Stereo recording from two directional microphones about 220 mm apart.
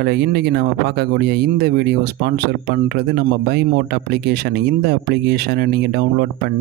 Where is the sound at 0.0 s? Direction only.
45° right (ahead or behind).